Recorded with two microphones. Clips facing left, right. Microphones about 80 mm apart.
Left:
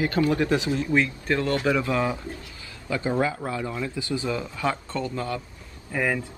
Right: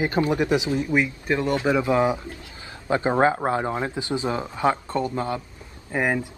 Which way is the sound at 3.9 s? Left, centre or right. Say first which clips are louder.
Right 2 dB; right.